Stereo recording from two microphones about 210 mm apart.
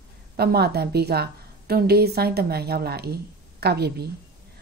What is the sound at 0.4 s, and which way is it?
A woman's voice, 50° right (ahead or behind).